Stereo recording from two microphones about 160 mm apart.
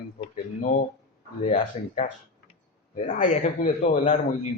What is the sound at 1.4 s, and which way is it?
Speech, 50° left (ahead or behind).